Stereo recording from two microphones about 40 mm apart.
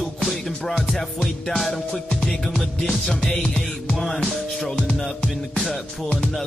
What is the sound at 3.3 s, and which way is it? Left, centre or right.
Music, left.